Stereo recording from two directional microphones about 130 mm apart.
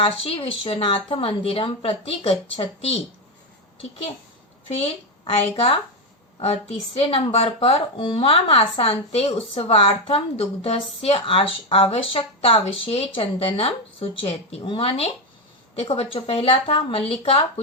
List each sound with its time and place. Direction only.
0.0 s speech: 45° left (ahead or behind)
4.7 s speech: 50° left (ahead or behind)